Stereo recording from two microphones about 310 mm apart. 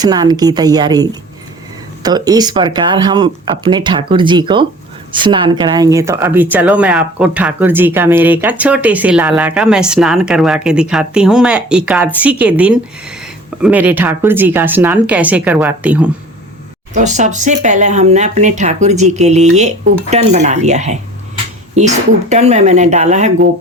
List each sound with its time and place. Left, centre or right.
0.0 s speech: centre
2.0 s speech: centre
16.9 s speech: right